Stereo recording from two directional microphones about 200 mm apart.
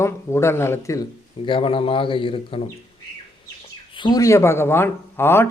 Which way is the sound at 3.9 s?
20° left (ahead or behind).